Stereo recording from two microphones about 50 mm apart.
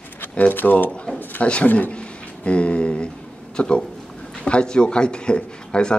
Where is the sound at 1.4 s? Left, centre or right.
Left.